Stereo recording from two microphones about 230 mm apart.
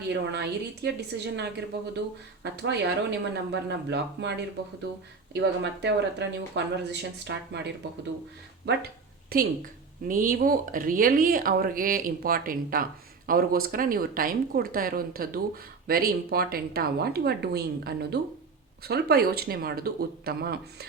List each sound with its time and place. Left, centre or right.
0.1 s speech: right